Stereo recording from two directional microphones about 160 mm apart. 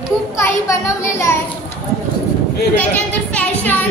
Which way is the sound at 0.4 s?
15° left (ahead or behind).